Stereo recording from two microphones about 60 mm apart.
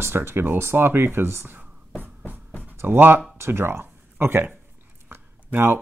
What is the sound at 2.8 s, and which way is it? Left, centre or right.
Speech, right.